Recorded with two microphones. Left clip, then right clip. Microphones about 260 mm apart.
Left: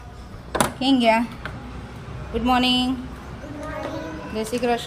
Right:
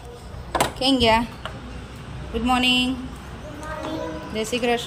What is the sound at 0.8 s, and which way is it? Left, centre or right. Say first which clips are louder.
Speech: even; centre.